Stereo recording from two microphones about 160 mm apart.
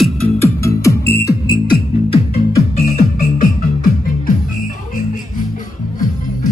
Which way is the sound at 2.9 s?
60° left (ahead or behind).